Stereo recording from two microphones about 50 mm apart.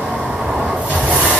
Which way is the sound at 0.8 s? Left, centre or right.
Right.